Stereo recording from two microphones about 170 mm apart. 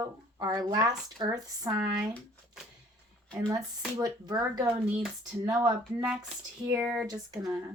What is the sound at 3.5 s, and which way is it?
Speech, 20° right (ahead or behind).